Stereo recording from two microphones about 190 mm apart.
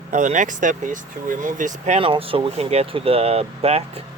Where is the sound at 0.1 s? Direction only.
40° right (ahead or behind).